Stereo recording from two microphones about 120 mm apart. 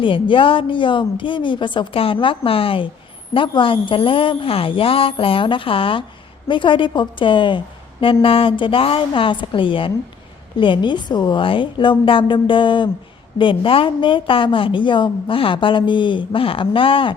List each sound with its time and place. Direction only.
0.0 s a woman's voice: 45° left (ahead or behind)